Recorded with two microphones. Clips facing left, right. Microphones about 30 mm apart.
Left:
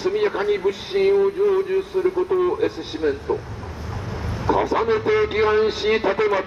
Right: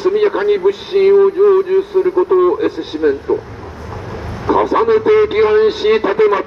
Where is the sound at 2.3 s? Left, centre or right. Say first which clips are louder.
Right 8 dB; right.